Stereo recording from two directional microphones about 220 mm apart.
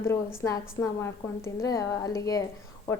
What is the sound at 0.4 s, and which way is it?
A woman's voice, 15° left (ahead or behind).